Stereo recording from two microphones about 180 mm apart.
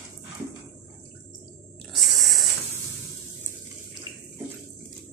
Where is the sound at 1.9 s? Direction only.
Centre (ahead or behind).